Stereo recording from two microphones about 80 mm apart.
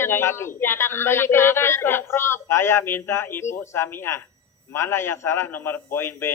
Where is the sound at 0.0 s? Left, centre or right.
Left.